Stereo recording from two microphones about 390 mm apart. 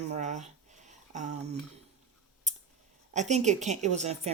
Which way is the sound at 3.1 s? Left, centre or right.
Centre.